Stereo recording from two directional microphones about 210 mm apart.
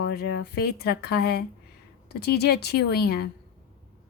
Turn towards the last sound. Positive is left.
turn(degrees=50)  # may be behind; listen again after turning